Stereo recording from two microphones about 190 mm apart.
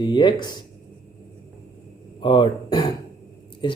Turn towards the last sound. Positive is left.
turn(degrees=25)  # may be behind; listen again after turning